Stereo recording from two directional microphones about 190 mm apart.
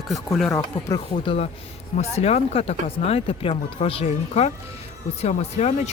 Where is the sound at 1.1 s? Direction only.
35° left (ahead or behind).